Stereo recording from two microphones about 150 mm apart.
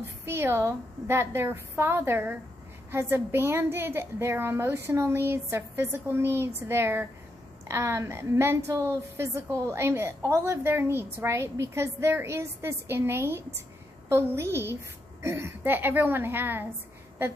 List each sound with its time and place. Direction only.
0.0 s a woman's voice: 15° right (ahead or behind)